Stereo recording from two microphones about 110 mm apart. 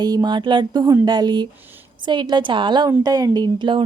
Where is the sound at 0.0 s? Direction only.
40° right (ahead or behind).